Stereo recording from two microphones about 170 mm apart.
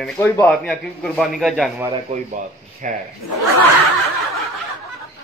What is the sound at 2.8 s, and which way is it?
Speech, 50° right (ahead or behind).